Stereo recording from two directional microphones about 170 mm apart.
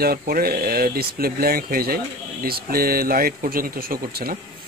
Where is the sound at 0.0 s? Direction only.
60° right (ahead or behind).